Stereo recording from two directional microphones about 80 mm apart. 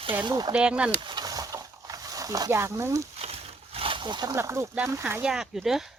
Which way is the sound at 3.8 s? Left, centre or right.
Right.